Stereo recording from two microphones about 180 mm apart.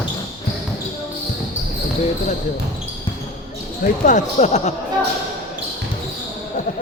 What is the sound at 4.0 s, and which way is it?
Speech, 45° left (ahead or behind).